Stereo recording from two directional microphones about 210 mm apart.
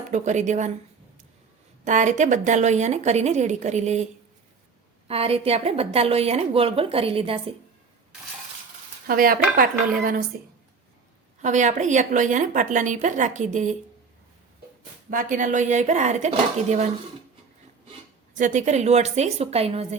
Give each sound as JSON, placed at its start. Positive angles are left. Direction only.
{"t": 0.1, "sound": "a woman's voice", "side_deg": -35}
{"t": 1.8, "sound": "a woman's voice", "side_deg": -35}
{"t": 5.0, "sound": "a woman's voice", "side_deg": -30}
{"t": 9.0, "sound": "stir", "side_deg": -45}
{"t": 11.4, "sound": "a woman's voice", "side_deg": -35}
{"t": 15.1, "sound": "a woman's voice", "side_deg": -40}
{"t": 18.3, "sound": "a woman's voice", "side_deg": -35}